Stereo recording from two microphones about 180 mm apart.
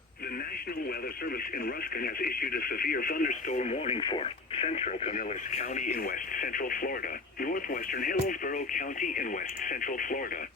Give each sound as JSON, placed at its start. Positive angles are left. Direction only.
{"t": 1.6, "sound": "speech", "side_deg": 55}